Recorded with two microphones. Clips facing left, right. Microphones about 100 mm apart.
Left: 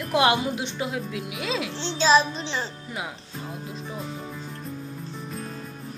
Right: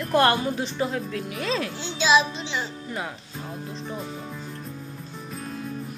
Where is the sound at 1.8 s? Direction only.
35° left (ahead or behind).